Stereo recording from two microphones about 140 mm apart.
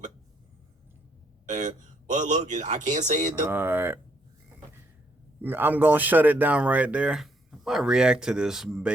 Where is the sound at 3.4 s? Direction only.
15° right (ahead or behind).